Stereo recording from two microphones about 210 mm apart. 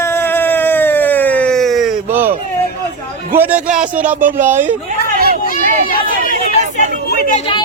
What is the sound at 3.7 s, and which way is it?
Music, 40° right (ahead or behind).